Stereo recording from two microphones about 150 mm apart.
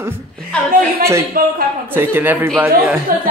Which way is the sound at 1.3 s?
70° right (ahead or behind).